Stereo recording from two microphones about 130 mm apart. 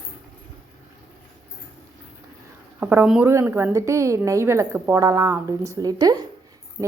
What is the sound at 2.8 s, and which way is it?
A woman's voice, 15° right (ahead or behind).